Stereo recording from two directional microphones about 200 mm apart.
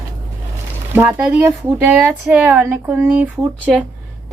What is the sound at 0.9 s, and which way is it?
Speech, 10° right (ahead or behind).